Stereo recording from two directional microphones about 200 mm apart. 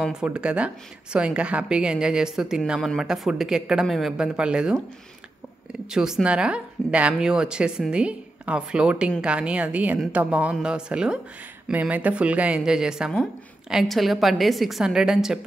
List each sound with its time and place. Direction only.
0.0 s a woman's voice: 5° right (ahead or behind)
5.9 s a woman's voice: 5° right (ahead or behind)